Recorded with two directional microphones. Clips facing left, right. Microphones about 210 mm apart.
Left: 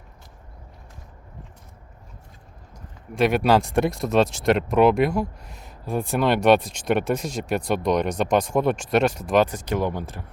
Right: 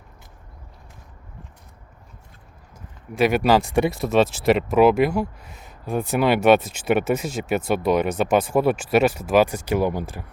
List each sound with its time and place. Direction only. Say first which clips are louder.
3.2 s speech: right 1 dB; centre (ahead or behind)